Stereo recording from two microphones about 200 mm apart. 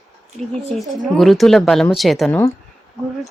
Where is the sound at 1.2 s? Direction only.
Centre (ahead or behind).